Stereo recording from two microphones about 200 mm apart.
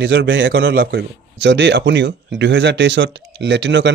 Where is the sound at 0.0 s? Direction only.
65° right (ahead or behind).